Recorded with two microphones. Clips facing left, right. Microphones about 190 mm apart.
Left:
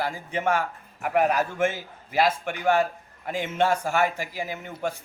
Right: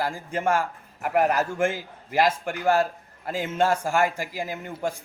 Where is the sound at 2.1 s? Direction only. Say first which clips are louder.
Right 1 dB; 45° right (ahead or behind).